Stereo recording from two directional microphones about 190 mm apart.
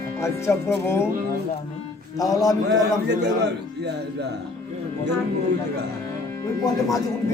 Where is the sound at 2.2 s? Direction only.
20° left (ahead or behind).